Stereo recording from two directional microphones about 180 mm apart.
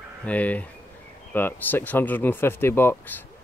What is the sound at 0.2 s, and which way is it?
Speech, 10° left (ahead or behind).